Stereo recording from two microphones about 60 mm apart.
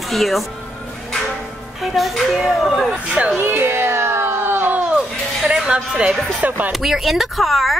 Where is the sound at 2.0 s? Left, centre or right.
Centre.